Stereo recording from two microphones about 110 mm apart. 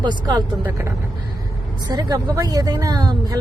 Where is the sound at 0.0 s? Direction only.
40° right (ahead or behind).